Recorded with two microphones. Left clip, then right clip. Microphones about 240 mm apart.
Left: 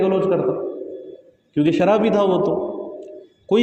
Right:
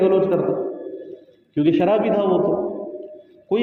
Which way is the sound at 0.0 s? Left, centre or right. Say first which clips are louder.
Right 1 dB; left.